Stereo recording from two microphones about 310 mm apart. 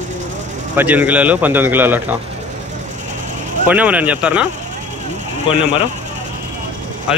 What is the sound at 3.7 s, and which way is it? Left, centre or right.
Speech, centre.